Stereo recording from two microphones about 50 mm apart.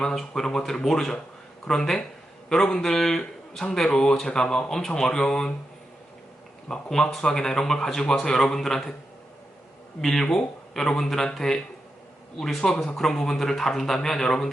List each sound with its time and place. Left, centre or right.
0.2 s a man's voice: centre
6.9 s a man's voice: centre
10.0 s a man's voice: centre